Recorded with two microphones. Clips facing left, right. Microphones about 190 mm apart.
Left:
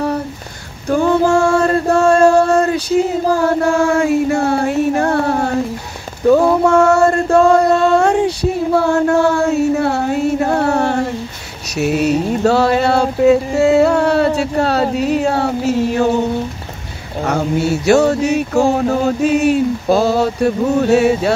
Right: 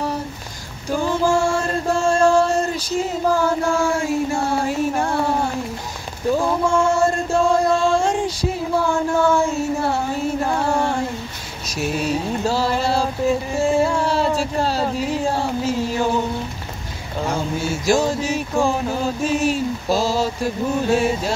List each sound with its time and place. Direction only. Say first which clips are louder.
0.8 s chant: left 6 dB; 60° left (ahead or behind)
6.3 s a sound: left 7 dB; 65° left (ahead or behind)
17.2 s mantra: left 6 dB; 70° left (ahead or behind)